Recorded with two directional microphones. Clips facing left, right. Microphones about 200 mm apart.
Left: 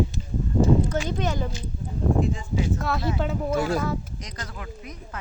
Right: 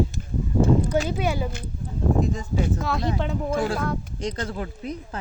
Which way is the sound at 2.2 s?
40° right (ahead or behind).